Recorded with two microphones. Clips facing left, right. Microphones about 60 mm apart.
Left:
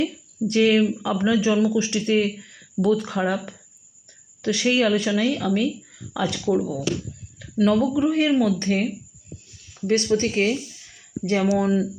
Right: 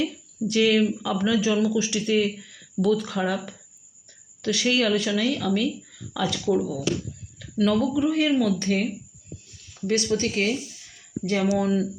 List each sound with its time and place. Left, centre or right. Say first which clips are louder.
0.0 s speech: left 2 dB; left